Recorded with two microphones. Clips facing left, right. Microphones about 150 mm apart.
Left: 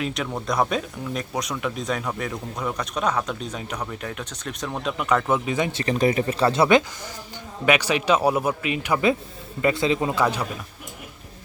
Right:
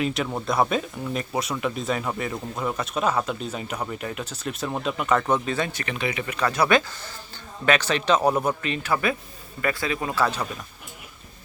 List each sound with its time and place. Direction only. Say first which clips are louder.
0.0 s speech: right 2 dB; centre (ahead or behind)
5.5 s a man's voice: left 2 dB; 15° left (ahead or behind)
5.7 s speech: left 8 dB; 35° left (ahead or behind)
7.6 s a man's voice: left 1 dB; 10° left (ahead or behind)